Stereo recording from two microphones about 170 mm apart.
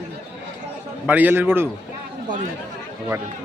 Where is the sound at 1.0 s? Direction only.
10° right (ahead or behind).